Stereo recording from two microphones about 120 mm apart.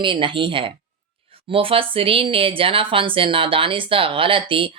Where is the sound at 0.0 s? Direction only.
45° right (ahead or behind).